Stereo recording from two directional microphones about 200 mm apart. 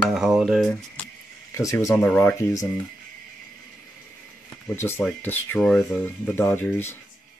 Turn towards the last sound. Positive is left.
turn(degrees=10)  # may be behind; listen again after turning